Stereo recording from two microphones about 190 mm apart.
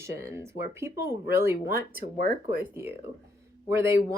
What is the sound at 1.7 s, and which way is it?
Speech, 45° right (ahead or behind).